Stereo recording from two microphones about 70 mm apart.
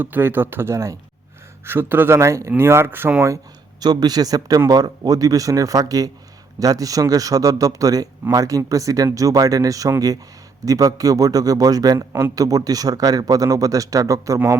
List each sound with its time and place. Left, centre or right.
0.0 s speech: right
3.8 s a man's voice: right